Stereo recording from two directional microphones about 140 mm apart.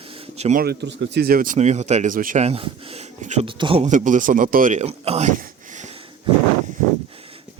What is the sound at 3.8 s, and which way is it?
Speech, 65° right (ahead or behind).